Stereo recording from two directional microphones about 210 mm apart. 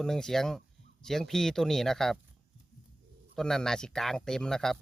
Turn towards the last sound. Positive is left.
turn(degrees=0)  # may be behind; listen again after turning